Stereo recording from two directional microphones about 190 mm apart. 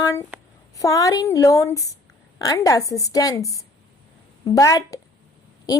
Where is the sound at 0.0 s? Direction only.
15° left (ahead or behind).